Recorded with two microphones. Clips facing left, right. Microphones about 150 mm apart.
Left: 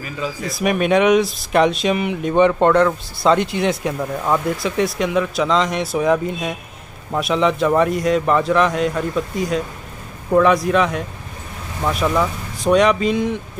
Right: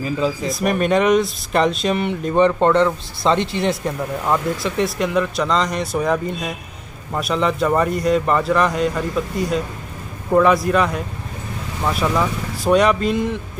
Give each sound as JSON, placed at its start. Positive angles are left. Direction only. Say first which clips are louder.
{"t": 0.5, "sound": "speech", "louder": "left 4 dB", "side_deg": 0}